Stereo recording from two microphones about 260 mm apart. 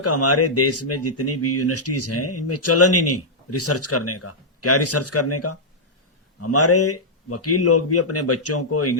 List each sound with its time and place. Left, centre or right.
0.0 s speech: left